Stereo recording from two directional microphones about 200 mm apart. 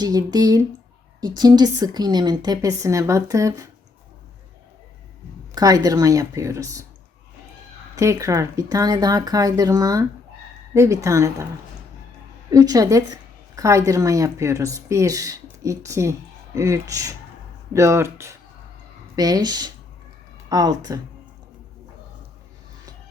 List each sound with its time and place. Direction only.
0.0 s a woman's voice: 20° right (ahead or behind)
5.5 s speech: 20° right (ahead or behind)
7.9 s speech: 15° right (ahead or behind)
12.5 s a woman's voice: 15° right (ahead or behind)